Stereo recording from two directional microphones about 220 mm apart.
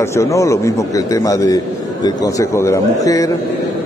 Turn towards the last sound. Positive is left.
turn(degrees=15)  # may be behind; listen again after turning